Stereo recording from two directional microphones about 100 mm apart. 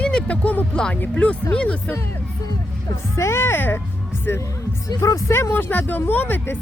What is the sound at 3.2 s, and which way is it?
Speech, 25° left (ahead or behind).